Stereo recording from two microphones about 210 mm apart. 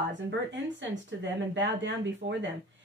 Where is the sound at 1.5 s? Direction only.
60° right (ahead or behind).